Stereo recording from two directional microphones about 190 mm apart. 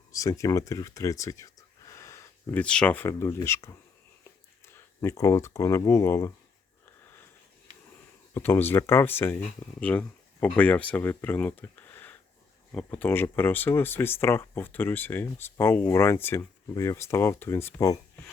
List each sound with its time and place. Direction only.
0.1 s speech: 15° left (ahead or behind)
8.3 s speech: 10° left (ahead or behind)